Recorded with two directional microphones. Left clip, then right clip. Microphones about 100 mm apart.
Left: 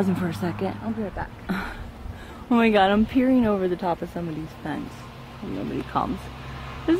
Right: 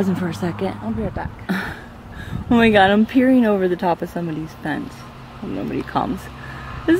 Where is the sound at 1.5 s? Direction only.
45° right (ahead or behind).